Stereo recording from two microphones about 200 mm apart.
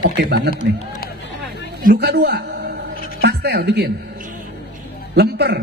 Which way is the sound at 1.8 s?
55° right (ahead or behind).